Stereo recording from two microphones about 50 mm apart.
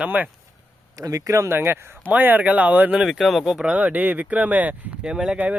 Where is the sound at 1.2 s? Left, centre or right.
Right.